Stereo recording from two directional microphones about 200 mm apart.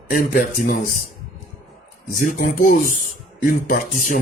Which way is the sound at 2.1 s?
45° left (ahead or behind).